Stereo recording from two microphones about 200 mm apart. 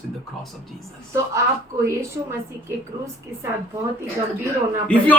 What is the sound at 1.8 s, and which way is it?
A woman's voice, 15° right (ahead or behind).